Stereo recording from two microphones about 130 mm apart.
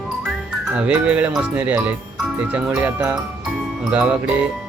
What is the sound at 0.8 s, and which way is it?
Speech, 10° right (ahead or behind).